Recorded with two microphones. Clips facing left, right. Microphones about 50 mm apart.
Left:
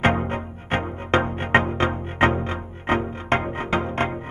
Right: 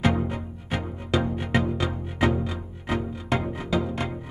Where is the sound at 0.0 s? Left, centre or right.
Left.